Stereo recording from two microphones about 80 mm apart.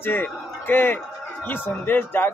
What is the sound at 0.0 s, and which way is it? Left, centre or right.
A man's voice, left.